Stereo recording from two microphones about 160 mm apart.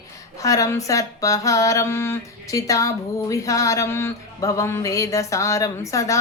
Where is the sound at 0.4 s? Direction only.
20° left (ahead or behind).